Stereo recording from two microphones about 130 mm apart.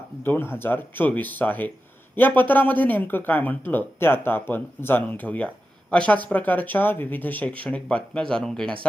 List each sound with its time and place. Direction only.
0.2 s speech: 15° left (ahead or behind)